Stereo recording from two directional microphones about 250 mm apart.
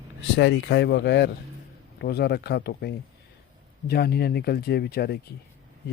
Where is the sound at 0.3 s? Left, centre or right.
Left.